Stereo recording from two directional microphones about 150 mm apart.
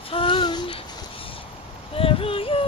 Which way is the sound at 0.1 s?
35° left (ahead or behind).